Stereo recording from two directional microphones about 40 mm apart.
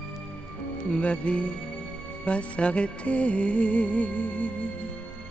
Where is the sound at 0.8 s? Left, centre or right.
Left.